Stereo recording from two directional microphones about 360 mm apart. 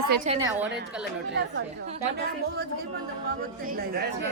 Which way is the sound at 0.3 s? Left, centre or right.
Centre.